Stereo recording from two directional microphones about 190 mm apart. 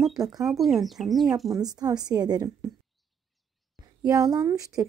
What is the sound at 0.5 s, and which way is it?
Speech, centre (ahead or behind).